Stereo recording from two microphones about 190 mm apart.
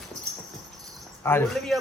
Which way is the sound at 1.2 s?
15° left (ahead or behind).